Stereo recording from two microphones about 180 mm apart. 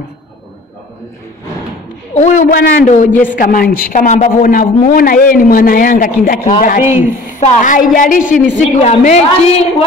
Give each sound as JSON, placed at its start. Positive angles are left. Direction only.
{"t": 2.1, "sound": "speech", "side_deg": 40}
{"t": 6.8, "sound": "a woman's voice", "side_deg": -15}
{"t": 7.3, "sound": "a woman's voice", "side_deg": 45}